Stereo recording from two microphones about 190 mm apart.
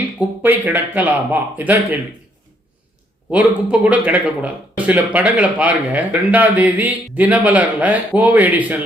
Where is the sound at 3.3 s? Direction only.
5° right (ahead or behind).